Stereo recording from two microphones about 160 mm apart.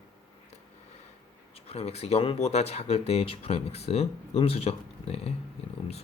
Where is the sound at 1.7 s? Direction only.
40° left (ahead or behind).